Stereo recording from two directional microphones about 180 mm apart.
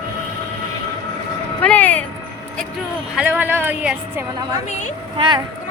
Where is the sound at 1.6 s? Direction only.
10° left (ahead or behind).